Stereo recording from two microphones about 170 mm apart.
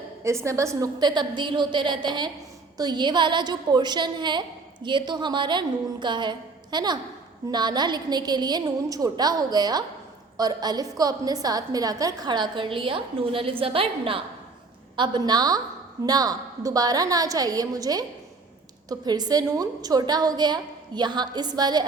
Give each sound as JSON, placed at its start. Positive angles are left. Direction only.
{"t": 0.3, "sound": "a woman's voice", "side_deg": -15}